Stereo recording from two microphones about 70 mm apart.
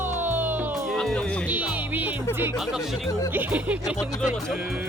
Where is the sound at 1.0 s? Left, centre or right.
Centre.